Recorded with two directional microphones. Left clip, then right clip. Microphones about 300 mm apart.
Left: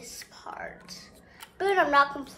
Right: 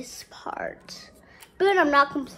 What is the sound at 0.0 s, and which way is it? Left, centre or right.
A woman's voice, centre.